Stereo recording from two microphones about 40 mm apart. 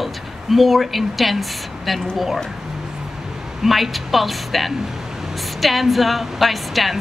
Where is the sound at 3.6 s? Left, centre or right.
Centre.